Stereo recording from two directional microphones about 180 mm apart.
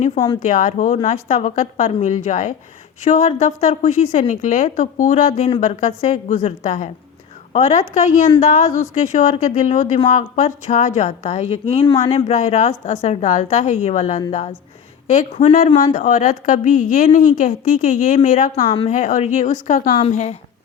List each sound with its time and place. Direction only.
0.4 s a woman's voice: 45° left (ahead or behind)
18.6 s a woman's voice: 30° left (ahead or behind)
18.9 s a woman's voice: 45° left (ahead or behind)
20.0 s a woman's voice: 35° left (ahead or behind)